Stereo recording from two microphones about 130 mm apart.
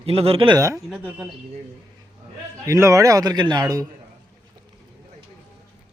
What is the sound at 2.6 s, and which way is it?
A man's voice, 25° right (ahead or behind).